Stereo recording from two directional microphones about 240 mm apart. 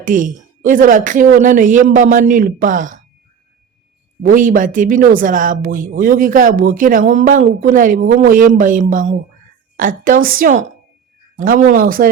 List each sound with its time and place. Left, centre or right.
0.0 s speech: right
4.2 s speech: right